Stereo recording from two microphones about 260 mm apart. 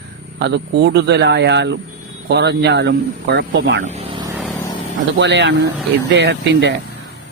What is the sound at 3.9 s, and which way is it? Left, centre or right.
Speech, right.